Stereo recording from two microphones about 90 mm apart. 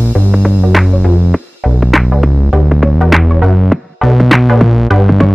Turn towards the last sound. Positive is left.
turn(degrees=0)  # may be behind; listen again after turning